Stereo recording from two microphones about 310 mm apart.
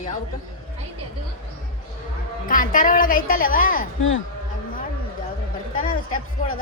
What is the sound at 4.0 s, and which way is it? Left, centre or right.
Speech, left.